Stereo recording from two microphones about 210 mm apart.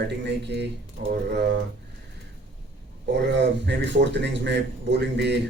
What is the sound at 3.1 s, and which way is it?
Speech, 55° right (ahead or behind).